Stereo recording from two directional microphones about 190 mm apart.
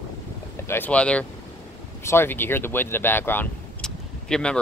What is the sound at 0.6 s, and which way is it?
Speech, 10° left (ahead or behind).